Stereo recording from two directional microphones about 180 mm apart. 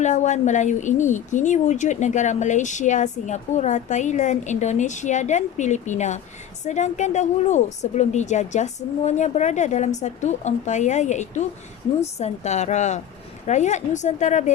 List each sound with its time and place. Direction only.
0.0 s speech: 40° left (ahead or behind)